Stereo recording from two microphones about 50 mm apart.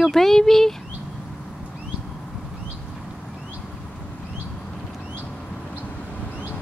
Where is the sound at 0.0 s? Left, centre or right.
Centre.